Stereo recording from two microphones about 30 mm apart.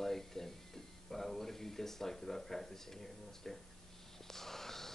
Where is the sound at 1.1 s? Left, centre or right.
Centre.